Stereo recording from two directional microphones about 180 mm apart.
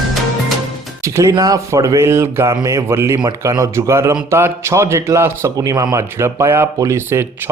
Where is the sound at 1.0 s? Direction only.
15° right (ahead or behind).